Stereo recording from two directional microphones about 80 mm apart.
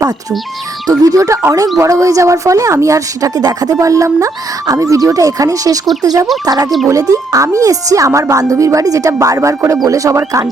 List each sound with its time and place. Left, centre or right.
0.9 s a woman's voice: right